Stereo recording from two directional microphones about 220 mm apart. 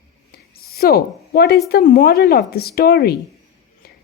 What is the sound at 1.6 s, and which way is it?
Speech, 40° left (ahead or behind).